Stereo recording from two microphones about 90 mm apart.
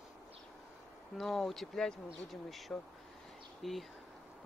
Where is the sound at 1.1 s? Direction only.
Centre (ahead or behind).